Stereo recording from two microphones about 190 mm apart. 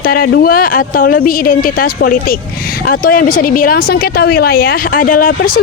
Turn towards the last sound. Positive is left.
turn(degrees=50)  # may be behind; listen again after turning